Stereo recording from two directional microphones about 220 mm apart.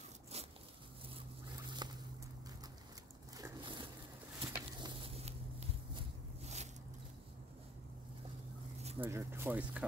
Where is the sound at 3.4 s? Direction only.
20° right (ahead or behind).